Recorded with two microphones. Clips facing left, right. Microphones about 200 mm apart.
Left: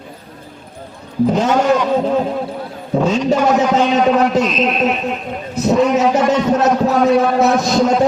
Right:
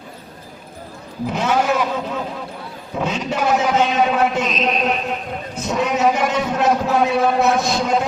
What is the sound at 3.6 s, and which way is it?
A man's voice, 5° right (ahead or behind).